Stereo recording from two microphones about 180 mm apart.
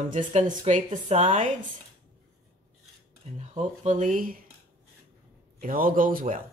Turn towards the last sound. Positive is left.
turn(degrees=-50)  # may be behind; listen again after turning